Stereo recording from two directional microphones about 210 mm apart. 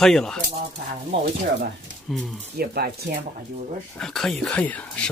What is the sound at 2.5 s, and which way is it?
Speech, 50° right (ahead or behind).